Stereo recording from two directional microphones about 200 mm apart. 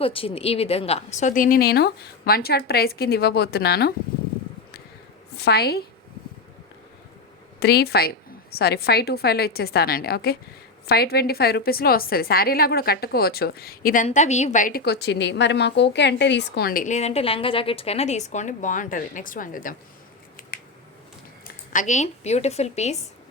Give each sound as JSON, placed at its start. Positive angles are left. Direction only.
{"t": 0.0, "sound": "a woman's voice", "side_deg": 30}
{"t": 5.4, "sound": "a woman's voice", "side_deg": 50}
{"t": 7.6, "sound": "a woman's voice", "side_deg": 50}
{"t": 21.4, "sound": "speech", "side_deg": 40}